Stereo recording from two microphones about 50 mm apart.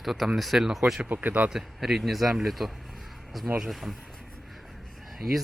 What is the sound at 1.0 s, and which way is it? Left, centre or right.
Speech, right.